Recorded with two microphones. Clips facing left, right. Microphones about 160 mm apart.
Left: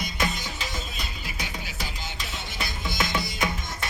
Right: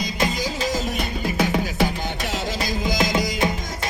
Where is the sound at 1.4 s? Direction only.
75° right (ahead or behind).